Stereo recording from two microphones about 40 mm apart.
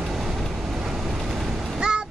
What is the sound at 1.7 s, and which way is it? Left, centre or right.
Vehicle, right.